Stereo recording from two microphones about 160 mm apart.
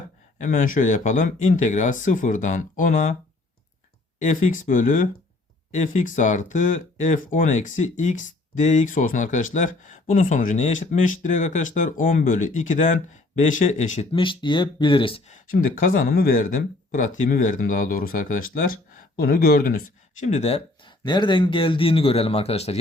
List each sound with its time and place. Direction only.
0.3 s speech: 55° left (ahead or behind)
4.2 s speech: 55° left (ahead or behind)
14.1 s a man's voice: 30° left (ahead or behind)
15.3 s speech: 60° left (ahead or behind)
20.2 s speech: 45° left (ahead or behind)
20.8 s a man's voice: 30° left (ahead or behind)